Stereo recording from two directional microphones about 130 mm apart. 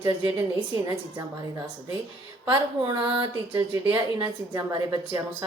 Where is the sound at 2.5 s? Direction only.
40° right (ahead or behind).